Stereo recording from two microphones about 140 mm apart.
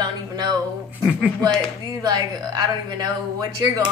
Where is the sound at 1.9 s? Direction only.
25° right (ahead or behind).